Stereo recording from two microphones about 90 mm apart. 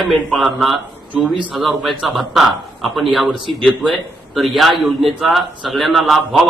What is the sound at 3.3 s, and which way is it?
Speech, 65° right (ahead or behind).